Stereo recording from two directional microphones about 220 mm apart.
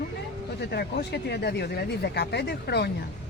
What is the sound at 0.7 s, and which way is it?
Speech, 45° left (ahead or behind).